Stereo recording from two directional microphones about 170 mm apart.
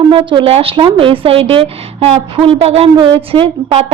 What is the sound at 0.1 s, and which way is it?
A woman's voice, 30° right (ahead or behind).